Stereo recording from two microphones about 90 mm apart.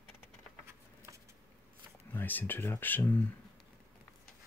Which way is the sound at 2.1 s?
20° left (ahead or behind).